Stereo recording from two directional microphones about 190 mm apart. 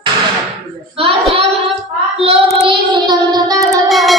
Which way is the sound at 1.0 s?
30° right (ahead or behind).